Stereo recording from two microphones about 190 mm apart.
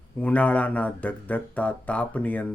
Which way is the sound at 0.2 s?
5° left (ahead or behind).